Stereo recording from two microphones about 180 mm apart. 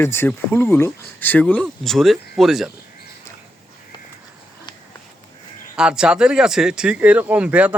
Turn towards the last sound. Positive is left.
turn(degrees=-10)  # may be behind; listen again after turning